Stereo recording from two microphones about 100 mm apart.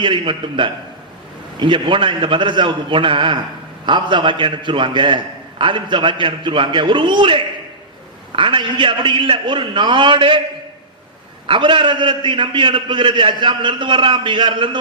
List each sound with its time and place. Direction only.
0.0 s a man's voice: 55° right (ahead or behind)
11.4 s a man's voice: 55° right (ahead or behind)